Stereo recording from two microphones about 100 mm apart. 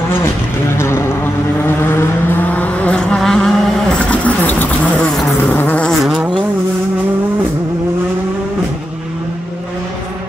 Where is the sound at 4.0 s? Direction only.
15° left (ahead or behind).